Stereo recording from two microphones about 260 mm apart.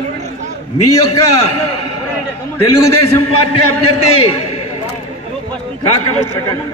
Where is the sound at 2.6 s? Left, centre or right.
Left.